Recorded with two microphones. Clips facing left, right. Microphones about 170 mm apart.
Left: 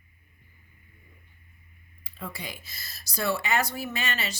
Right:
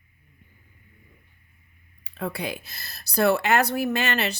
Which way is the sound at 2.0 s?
65° right (ahead or behind).